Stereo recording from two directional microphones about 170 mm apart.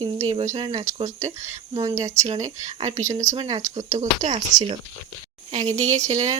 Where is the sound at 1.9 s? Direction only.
20° right (ahead or behind).